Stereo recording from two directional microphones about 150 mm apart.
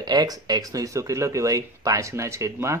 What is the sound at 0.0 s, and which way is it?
Speech, 25° right (ahead or behind).